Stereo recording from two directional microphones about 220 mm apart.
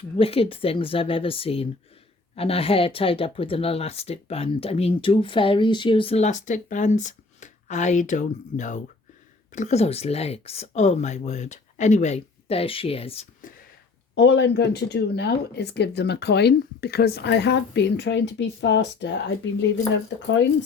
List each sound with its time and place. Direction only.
0.2 s speech: 25° left (ahead or behind)
13.4 s a sound: 35° left (ahead or behind)
14.2 s speech: 50° left (ahead or behind)